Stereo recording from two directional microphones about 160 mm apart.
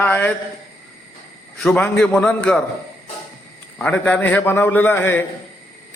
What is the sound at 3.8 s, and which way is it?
A man's voice, 10° left (ahead or behind).